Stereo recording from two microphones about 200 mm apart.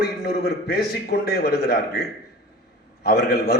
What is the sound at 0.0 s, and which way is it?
A man's voice, 50° left (ahead or behind).